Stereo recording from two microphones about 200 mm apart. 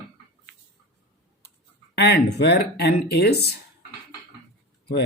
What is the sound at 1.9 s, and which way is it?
Speech, 55° left (ahead or behind).